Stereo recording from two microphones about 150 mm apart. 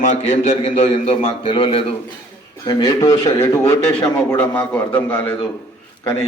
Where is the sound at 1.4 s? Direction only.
35° left (ahead or behind).